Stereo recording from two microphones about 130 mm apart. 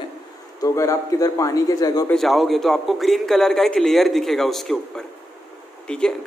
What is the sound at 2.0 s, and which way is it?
A man's voice, centre (ahead or behind).